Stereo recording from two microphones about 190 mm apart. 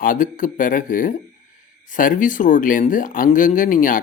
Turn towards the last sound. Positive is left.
turn(degrees=45)  # may be behind; listen again after turning